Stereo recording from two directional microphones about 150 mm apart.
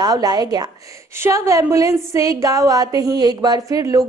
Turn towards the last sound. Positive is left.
turn(degrees=-25)  # may be behind; listen again after turning